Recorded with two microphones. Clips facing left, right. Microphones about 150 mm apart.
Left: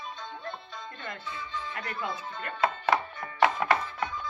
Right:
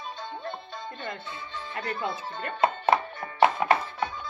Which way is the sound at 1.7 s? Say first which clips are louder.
Right 6 dB; 25° right (ahead or behind).